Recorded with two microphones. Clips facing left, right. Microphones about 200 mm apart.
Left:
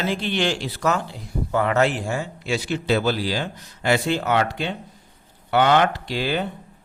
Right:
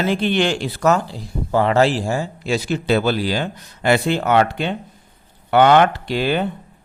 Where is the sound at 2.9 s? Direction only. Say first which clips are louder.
Right 3 dB; 60° right (ahead or behind).